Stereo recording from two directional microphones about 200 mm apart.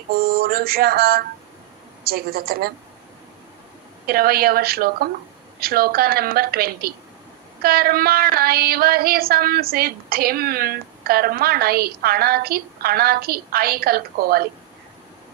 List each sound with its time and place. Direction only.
0.1 s child singing: 50° right (ahead or behind)
4.0 s child singing: 50° right (ahead or behind)